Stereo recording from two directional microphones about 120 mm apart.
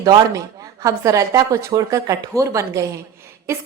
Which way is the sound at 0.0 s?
30° right (ahead or behind).